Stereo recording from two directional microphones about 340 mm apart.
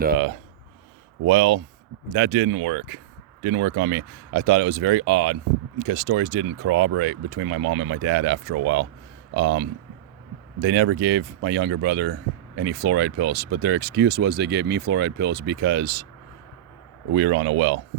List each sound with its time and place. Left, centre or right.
1.3 s speech: right
17.2 s speech: right